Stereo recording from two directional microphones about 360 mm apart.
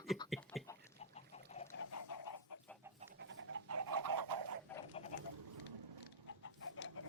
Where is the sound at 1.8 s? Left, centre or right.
Left.